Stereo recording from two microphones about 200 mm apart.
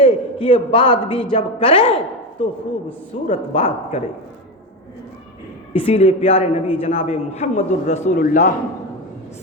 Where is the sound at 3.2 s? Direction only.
35° left (ahead or behind).